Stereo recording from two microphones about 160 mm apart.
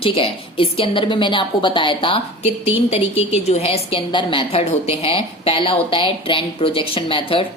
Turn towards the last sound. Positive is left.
turn(degrees=35)  # may be behind; listen again after turning